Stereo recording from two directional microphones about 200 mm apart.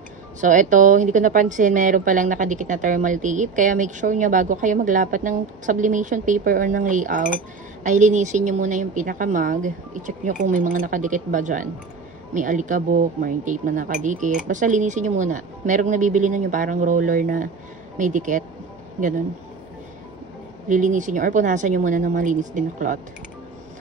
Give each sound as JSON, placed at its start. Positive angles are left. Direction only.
{"t": 0.4, "sound": "a woman's voice", "side_deg": -40}
{"t": 20.6, "sound": "a woman's voice", "side_deg": -40}